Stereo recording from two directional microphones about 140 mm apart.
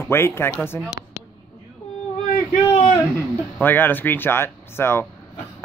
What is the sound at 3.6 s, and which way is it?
Speech, 15° left (ahead or behind).